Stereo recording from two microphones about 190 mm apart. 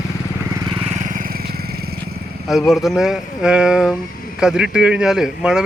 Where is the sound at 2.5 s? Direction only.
Centre (ahead or behind).